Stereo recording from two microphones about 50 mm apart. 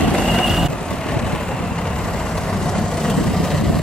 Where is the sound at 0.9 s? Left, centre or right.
Centre.